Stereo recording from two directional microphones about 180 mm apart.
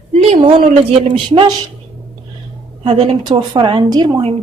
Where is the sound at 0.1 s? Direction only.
35° right (ahead or behind).